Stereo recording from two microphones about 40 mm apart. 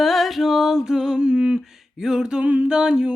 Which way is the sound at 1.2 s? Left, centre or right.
Right.